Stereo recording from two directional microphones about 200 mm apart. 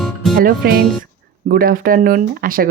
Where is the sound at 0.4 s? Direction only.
50° right (ahead or behind).